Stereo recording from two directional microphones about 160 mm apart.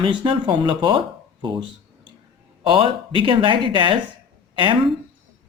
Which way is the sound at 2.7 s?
35° right (ahead or behind).